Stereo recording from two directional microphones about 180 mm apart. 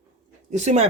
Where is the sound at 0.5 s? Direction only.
40° right (ahead or behind).